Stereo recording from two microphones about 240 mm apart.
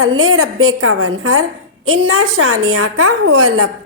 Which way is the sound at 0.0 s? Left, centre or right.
Right.